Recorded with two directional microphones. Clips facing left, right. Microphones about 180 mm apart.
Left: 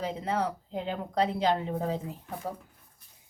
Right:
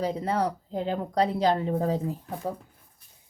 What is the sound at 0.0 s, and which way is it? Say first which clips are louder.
Speech: right 4 dB; 40° right (ahead or behind).